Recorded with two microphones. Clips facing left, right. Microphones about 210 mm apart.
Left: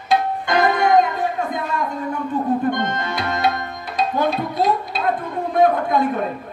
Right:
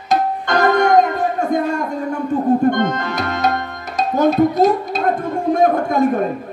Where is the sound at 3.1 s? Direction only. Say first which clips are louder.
Right 2 dB; 45° right (ahead or behind).